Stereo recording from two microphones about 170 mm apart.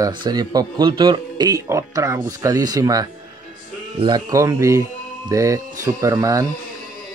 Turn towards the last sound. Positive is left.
turn(degrees=-20)  # may be behind; listen again after turning